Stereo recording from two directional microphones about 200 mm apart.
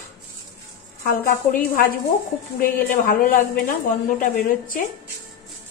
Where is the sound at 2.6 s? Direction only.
45° left (ahead or behind).